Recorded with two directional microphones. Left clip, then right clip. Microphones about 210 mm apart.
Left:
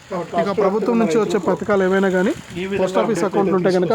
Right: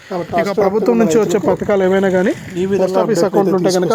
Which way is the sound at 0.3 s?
20° right (ahead or behind).